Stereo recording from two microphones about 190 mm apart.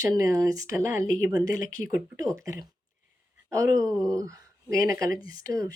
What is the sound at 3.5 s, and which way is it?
Speech, 15° right (ahead or behind).